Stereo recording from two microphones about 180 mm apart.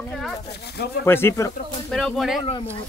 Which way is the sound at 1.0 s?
15° left (ahead or behind).